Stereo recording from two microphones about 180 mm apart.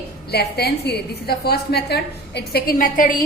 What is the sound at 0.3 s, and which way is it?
A woman's voice, 65° left (ahead or behind).